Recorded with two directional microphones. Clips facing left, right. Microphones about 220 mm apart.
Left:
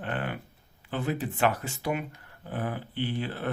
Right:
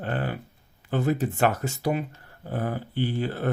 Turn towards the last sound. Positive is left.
turn(degrees=-40)  # may be behind; listen again after turning